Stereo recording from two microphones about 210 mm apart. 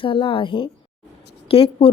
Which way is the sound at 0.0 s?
25° left (ahead or behind).